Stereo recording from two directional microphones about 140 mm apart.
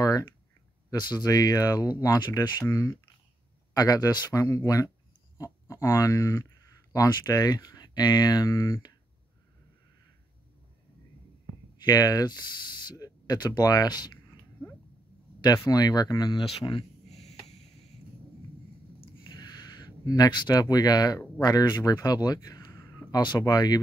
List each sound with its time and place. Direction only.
0.8 s speech: 30° left (ahead or behind)
2.6 s speech: 20° left (ahead or behind)
11.8 s speech: 25° left (ahead or behind)
14.2 s sneeze: 15° left (ahead or behind)
15.4 s speech: 25° left (ahead or behind)
16.4 s a sound: 40° left (ahead or behind)
18.9 s a sound: 30° left (ahead or behind)
21.4 s speech: 30° left (ahead or behind)